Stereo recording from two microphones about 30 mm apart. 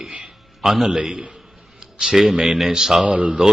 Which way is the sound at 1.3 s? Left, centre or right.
Right.